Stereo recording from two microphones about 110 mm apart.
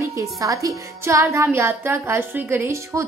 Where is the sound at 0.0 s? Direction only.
30° right (ahead or behind).